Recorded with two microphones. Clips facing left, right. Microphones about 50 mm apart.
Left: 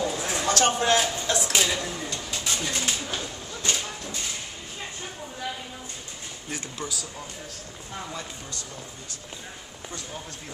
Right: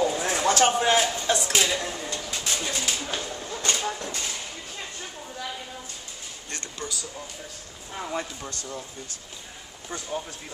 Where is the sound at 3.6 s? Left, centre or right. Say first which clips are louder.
Right 2 dB; right.